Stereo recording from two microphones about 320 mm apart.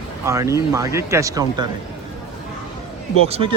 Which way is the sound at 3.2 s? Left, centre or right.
Centre.